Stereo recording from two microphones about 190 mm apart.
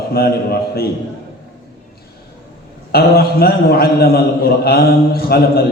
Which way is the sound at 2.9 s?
55° left (ahead or behind).